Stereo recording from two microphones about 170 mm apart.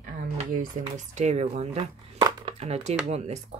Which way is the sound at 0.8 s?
40° right (ahead or behind).